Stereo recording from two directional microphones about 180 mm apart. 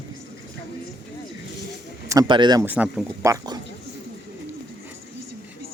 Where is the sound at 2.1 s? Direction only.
25° right (ahead or behind).